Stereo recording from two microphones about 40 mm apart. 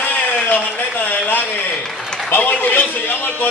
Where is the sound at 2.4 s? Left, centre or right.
Left.